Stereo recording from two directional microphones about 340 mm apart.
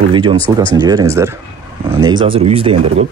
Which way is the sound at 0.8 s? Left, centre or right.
Centre.